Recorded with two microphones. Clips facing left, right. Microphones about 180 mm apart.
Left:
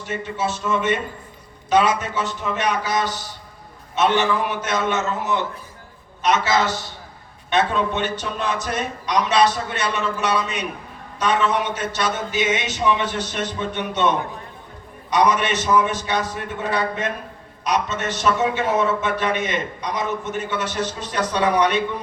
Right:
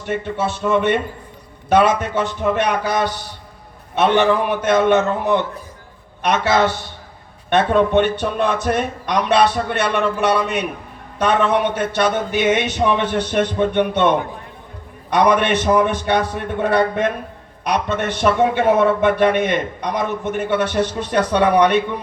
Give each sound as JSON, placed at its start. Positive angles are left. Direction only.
{"t": 0.3, "sound": "a man's voice", "side_deg": -60}